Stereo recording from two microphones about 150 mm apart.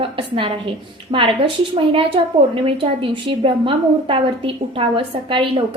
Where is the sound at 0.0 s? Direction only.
35° right (ahead or behind).